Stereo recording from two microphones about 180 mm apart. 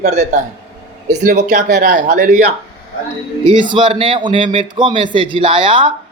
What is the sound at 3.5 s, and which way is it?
A man's voice, 25° right (ahead or behind).